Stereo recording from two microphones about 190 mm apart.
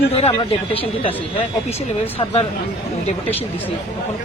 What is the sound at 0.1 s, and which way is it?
Speech, 30° left (ahead or behind).